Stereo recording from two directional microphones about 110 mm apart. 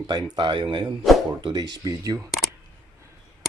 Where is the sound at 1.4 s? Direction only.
40° right (ahead or behind).